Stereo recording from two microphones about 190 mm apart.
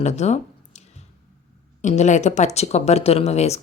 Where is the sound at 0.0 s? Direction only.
35° left (ahead or behind).